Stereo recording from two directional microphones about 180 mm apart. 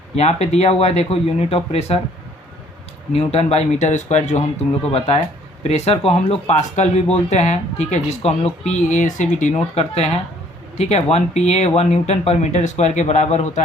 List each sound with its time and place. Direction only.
0.2 s speech: 35° left (ahead or behind)
3.1 s speech: 35° left (ahead or behind)